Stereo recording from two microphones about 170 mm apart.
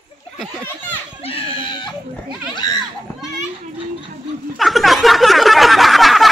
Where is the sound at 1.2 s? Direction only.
35° left (ahead or behind).